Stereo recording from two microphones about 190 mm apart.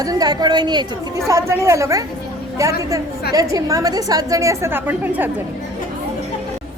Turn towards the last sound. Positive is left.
turn(degrees=-10)  # may be behind; listen again after turning